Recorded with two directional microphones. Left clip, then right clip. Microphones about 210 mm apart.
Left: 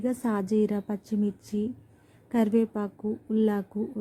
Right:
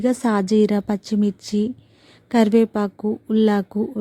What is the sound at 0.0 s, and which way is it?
Speech, 35° right (ahead or behind).